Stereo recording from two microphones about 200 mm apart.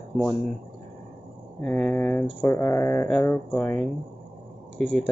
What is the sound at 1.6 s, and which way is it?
Speech, 10° left (ahead or behind).